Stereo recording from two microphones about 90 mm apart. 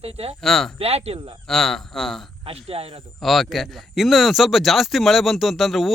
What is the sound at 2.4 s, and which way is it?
Speech, 90° right.